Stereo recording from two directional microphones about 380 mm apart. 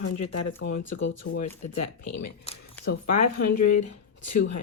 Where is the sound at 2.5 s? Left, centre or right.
Left.